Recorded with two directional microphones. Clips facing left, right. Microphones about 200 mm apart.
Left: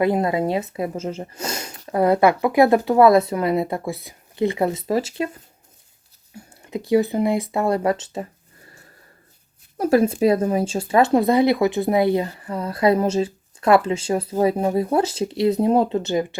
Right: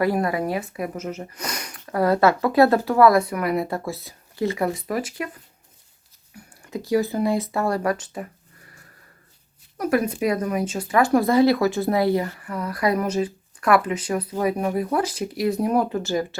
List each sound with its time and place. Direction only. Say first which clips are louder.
0.0 s speech: left 3 dB; 20° left (ahead or behind)
6.3 s a sound: left 3 dB; 20° left (ahead or behind)
6.9 s speech: left 3 dB; 20° left (ahead or behind)
9.7 s speech: left 5 dB; 30° left (ahead or behind)